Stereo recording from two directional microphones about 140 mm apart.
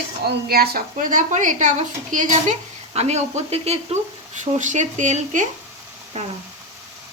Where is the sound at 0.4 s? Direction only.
90° right; by 6.3 s 55° right (ahead or behind).